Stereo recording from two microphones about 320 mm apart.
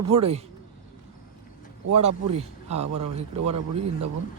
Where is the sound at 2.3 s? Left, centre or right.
Centre.